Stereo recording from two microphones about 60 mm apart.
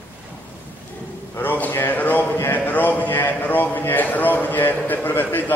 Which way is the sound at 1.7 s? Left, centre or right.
Left.